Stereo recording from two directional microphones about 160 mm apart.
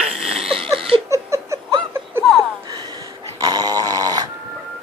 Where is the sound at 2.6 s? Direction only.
25° right (ahead or behind).